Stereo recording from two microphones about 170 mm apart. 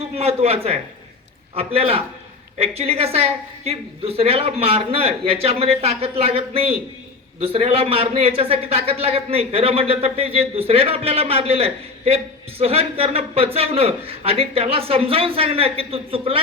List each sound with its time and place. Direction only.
0.0 s a man's voice: 35° right (ahead or behind)